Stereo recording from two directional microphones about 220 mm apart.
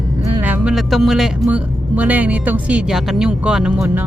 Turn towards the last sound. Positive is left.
turn(degrees=-5)  # may be behind; listen again after turning